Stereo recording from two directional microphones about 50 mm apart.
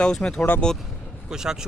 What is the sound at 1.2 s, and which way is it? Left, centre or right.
Speech, centre.